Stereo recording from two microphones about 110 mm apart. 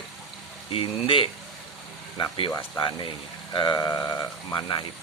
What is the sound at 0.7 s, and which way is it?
Speech, 55° left (ahead or behind).